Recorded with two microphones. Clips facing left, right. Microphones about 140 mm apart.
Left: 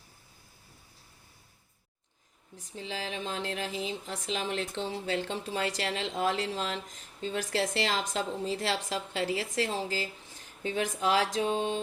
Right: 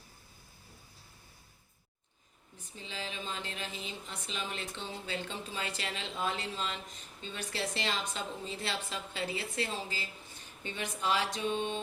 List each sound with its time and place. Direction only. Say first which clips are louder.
2.7 s a woman's voice: left 6 dB; 85° left